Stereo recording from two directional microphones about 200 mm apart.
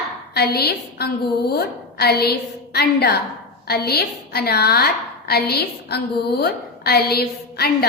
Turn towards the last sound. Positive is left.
turn(degrees=50)  # may be behind; listen again after turning